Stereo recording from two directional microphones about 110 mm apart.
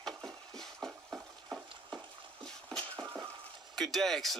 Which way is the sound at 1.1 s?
15° right (ahead or behind).